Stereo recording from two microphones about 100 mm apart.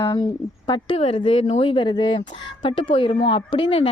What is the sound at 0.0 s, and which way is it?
Speech, 40° left (ahead or behind).